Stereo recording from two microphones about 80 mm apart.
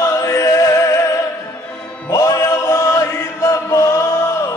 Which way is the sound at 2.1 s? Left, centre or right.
Left.